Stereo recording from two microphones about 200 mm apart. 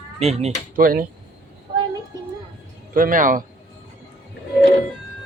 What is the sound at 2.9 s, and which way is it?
Speech, 45° right (ahead or behind).